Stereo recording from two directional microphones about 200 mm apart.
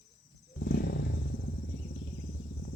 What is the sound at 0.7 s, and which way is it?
Wild animals, 55° left (ahead or behind).